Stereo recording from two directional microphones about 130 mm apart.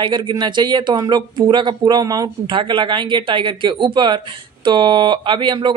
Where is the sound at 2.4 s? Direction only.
40° right (ahead or behind).